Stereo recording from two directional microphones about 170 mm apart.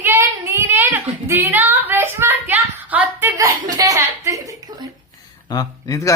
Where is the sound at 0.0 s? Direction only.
15° right (ahead or behind).